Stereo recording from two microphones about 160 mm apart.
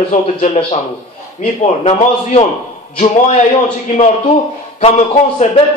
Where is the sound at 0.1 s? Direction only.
50° left (ahead or behind).